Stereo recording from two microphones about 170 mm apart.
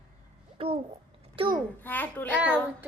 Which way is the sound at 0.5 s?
35° right (ahead or behind).